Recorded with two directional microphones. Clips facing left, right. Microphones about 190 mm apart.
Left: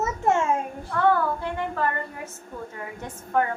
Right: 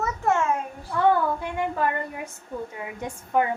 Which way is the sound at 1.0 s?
15° right (ahead or behind).